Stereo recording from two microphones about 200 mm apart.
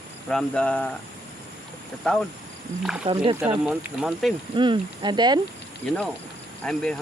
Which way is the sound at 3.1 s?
25° right (ahead or behind).